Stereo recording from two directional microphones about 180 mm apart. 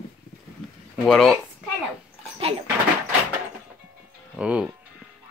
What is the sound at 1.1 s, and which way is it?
Speech, centre (ahead or behind).